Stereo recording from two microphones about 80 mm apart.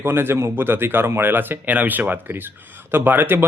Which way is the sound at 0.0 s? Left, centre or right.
Right.